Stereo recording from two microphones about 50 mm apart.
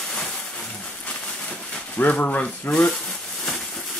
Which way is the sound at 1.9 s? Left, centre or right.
Left.